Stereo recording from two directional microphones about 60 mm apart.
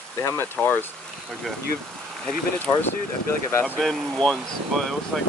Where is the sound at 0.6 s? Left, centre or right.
Left.